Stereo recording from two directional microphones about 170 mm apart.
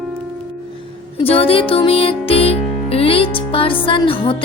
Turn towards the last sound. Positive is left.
turn(degrees=30)  # may be behind; listen again after turning